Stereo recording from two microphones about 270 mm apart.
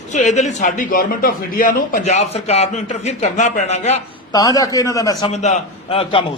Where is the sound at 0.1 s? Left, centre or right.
Left.